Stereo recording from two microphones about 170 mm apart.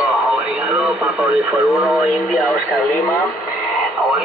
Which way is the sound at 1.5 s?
10° right (ahead or behind).